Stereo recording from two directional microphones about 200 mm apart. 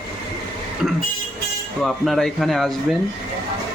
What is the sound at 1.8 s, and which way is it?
Speech, centre (ahead or behind).